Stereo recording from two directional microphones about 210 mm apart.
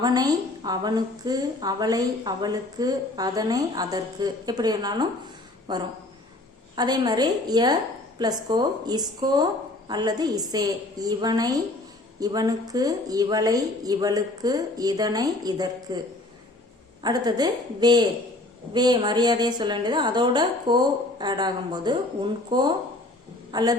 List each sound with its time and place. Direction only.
0.0 s a woman's voice: 20° right (ahead or behind)
6.7 s a woman's voice: 20° right (ahead or behind)
17.0 s a woman's voice: 20° right (ahead or behind)